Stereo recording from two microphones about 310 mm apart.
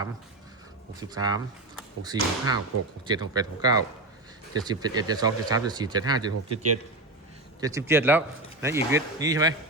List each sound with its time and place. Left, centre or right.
0.9 s speech: centre
6.5 s a man's voice: right
7.6 s speech: centre